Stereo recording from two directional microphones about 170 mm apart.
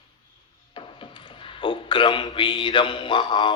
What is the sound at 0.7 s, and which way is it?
A man's voice, 30° left (ahead or behind).